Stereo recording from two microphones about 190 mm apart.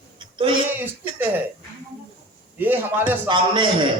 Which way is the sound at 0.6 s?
10° right (ahead or behind).